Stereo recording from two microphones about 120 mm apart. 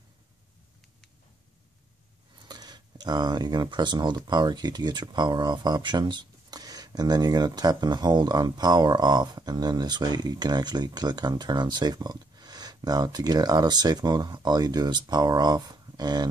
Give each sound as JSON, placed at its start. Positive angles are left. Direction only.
{"t": 2.3, "sound": "speech", "side_deg": -35}